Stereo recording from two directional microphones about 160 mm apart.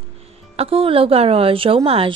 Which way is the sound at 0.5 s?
35° right (ahead or behind).